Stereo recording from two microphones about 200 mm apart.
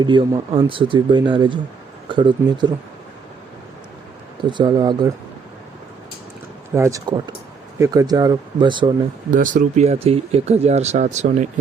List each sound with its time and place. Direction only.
0.0 s speech: 25° right (ahead or behind)
4.4 s speech: 25° right (ahead or behind)
6.7 s speech: 15° right (ahead or behind)
9.3 s speech: 40° right (ahead or behind)